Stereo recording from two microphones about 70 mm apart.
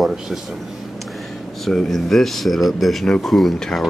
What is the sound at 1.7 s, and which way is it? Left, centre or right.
Speech, centre.